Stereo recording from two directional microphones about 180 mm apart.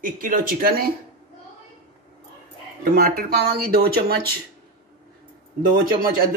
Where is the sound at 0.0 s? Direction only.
50° right (ahead or behind).